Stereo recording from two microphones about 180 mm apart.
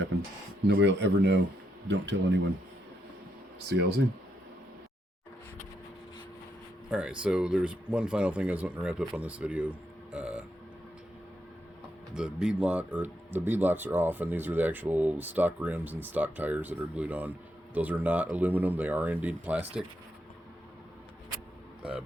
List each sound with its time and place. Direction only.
0.8 s speech: 75° right (ahead or behind)
3.7 s speech: 65° right (ahead or behind)
6.9 s speech: 5° right (ahead or behind)
10.1 s burping: 5° right (ahead or behind)
12.1 s speech: 5° right (ahead or behind)